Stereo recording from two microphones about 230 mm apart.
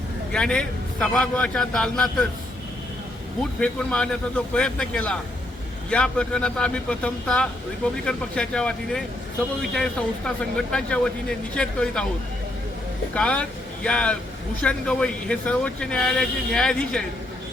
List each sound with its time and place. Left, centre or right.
0.3 s speech: centre
3.6 s speech: centre
13.1 s speech: centre